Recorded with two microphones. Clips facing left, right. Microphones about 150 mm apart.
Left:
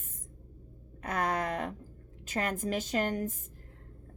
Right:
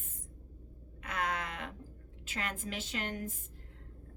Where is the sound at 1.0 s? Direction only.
40° left (ahead or behind).